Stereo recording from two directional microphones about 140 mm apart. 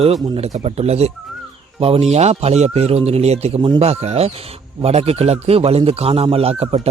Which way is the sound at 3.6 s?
35° right (ahead or behind).